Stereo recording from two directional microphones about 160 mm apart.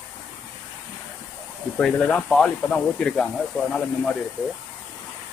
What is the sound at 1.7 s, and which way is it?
Speech, 5° left (ahead or behind).